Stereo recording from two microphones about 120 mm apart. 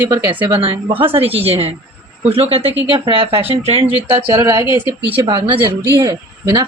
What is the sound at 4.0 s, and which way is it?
Speech, 45° right (ahead or behind).